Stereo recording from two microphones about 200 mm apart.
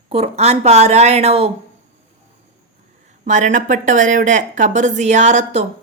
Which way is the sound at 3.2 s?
40° right (ahead or behind).